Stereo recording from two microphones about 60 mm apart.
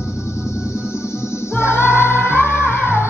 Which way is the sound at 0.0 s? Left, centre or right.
Left.